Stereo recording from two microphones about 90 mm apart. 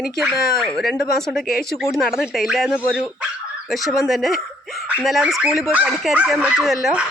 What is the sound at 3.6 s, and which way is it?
Speech, centre (ahead or behind).